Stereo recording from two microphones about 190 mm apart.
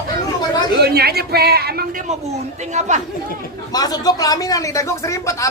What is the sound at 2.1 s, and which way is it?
Speech, 35° right (ahead or behind).